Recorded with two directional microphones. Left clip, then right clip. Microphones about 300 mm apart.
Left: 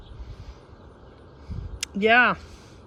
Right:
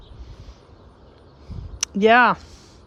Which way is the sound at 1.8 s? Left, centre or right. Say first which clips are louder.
Right 4 dB; centre.